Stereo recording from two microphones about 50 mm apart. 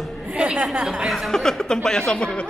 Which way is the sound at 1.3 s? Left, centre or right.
Centre.